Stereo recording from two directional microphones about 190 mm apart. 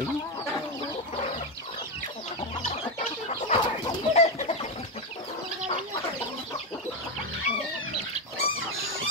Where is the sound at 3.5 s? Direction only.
25° left (ahead or behind).